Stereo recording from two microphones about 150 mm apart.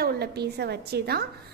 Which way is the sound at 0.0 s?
90° right.